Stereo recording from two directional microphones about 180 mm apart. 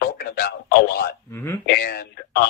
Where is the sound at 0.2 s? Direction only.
60° left (ahead or behind).